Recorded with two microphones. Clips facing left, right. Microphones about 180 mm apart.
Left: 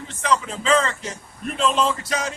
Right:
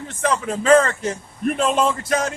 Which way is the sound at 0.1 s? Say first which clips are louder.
Right 1 dB; 50° right (ahead or behind).